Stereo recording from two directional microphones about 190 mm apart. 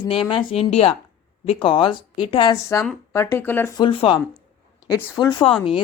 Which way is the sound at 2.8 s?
10° left (ahead or behind).